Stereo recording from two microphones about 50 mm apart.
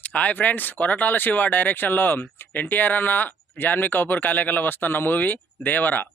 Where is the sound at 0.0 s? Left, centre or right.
Left.